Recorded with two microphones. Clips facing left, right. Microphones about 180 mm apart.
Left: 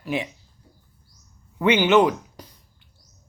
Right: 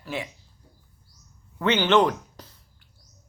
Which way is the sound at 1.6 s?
10° left (ahead or behind).